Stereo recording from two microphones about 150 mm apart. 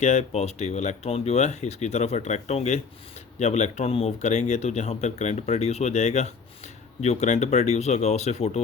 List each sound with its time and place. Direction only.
0.0 s speech: 45° left (ahead or behind)